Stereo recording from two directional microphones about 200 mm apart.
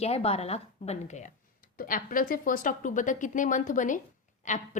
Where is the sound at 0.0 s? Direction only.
30° left (ahead or behind).